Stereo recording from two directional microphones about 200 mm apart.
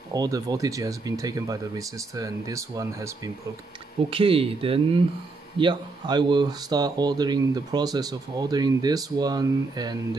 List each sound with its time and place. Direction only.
0.1 s speech: 20° right (ahead or behind)
4.1 s speech: 30° right (ahead or behind)